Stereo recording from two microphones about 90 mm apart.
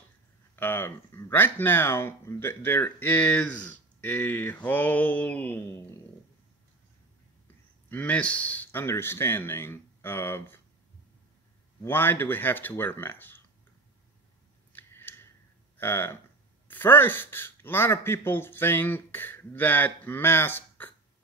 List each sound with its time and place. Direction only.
0.6 s speech: 25° left (ahead or behind)
7.9 s speech: 15° left (ahead or behind)
8.8 s speech: 30° left (ahead or behind)
11.8 s speech: 25° left (ahead or behind)
14.7 s a sound: 20° left (ahead or behind)
15.8 s speech: 25° left (ahead or behind)